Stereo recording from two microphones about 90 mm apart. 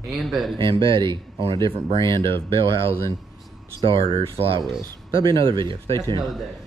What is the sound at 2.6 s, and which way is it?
Speech, 90° right.